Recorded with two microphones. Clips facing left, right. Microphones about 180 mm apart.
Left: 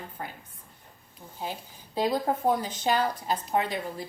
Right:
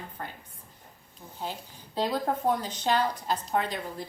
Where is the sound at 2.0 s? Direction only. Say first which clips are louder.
Left 2 dB; 15° left (ahead or behind).